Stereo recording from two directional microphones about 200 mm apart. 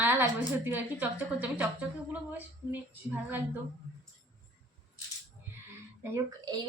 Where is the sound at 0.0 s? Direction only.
10° right (ahead or behind).